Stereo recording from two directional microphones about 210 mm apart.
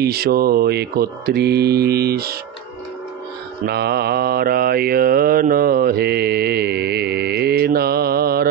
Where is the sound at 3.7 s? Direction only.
50° right (ahead or behind).